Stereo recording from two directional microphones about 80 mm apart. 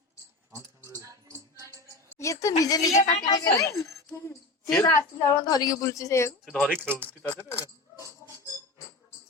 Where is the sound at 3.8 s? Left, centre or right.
Left.